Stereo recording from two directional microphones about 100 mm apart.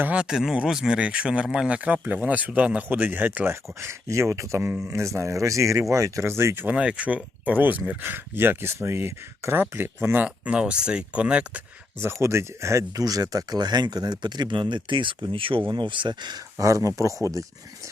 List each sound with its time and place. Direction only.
0.0 s a man's voice: 10° right (ahead or behind)
6.7 s speech: 10° right (ahead or behind)
11.9 s speech: 25° right (ahead or behind); by 16.4 s 50° right (ahead or behind)
16.6 s a man's voice: 35° right (ahead or behind)